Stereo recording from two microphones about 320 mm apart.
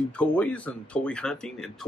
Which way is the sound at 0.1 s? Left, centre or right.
Centre.